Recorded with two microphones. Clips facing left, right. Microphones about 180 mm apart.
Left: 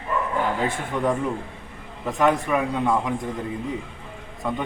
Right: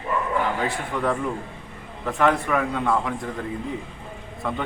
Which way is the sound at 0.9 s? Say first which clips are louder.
Left 2 dB; 20° left (ahead or behind).